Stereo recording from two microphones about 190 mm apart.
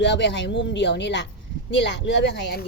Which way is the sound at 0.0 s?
65° left (ahead or behind).